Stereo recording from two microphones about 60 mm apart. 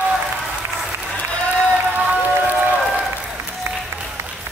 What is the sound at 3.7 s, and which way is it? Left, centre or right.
Applause, right.